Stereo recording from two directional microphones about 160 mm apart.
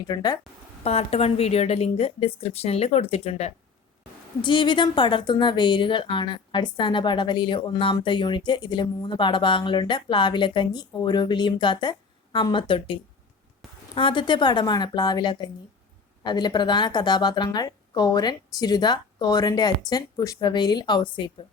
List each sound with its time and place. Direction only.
0.1 s a woman's voice: 25° left (ahead or behind)
0.9 s speech: 40° left (ahead or behind)
4.4 s a woman's voice: 30° left (ahead or behind)